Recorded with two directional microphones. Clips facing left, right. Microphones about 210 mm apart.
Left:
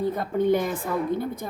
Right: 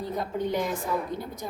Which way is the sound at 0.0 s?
55° left (ahead or behind).